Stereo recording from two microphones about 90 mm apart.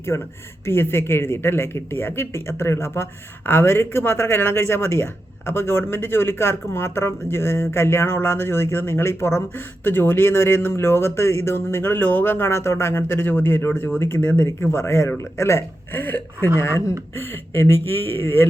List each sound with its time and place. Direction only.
0.6 s speech: 25° left (ahead or behind)
14.4 s speech: 30° left (ahead or behind)